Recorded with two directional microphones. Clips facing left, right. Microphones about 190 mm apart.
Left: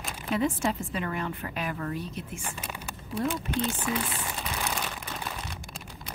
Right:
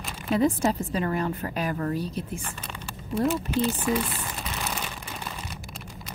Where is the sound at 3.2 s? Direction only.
Centre (ahead or behind).